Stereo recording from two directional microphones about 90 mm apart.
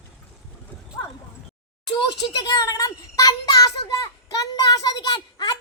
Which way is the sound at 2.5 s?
40° left (ahead or behind).